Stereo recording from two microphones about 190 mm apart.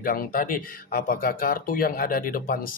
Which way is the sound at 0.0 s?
50° left (ahead or behind).